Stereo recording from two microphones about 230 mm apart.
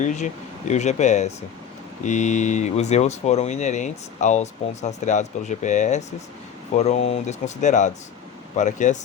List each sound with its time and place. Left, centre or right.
0.0 s speech: left